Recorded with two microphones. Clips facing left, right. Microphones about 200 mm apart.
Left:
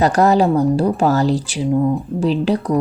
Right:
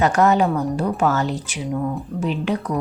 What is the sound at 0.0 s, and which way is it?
Speech, 35° left (ahead or behind).